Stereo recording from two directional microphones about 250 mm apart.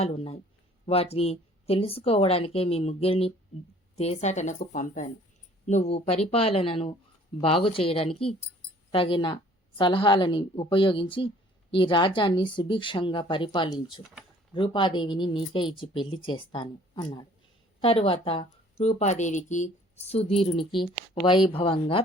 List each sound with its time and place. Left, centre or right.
0.0 s speech: left